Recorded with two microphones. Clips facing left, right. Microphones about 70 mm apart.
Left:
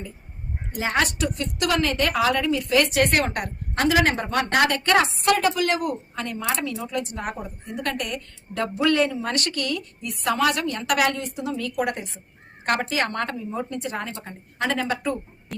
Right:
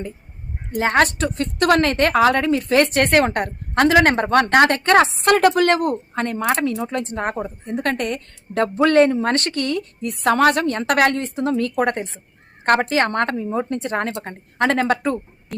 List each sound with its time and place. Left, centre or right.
0.8 s a woman's voice: right
4.5 s a woman's voice: right